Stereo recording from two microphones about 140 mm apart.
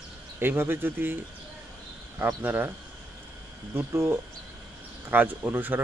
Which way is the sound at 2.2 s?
15° right (ahead or behind).